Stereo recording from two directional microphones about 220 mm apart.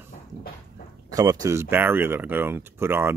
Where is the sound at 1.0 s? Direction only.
15° right (ahead or behind).